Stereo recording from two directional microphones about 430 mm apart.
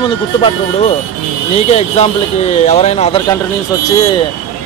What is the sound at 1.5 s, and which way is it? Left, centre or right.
Speech, centre.